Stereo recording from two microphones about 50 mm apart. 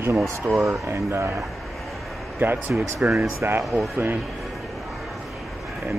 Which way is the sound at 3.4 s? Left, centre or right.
Right.